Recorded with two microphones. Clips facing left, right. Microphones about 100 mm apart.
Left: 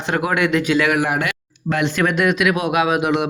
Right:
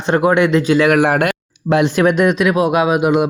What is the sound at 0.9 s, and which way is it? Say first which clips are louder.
Speech: right 6 dB; 60° right (ahead or behind).